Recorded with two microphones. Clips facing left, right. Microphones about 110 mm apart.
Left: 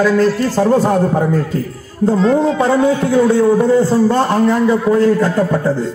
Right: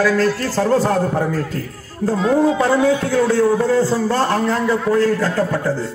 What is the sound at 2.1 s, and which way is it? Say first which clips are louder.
Speech: left 1 dB; 5° right (ahead or behind).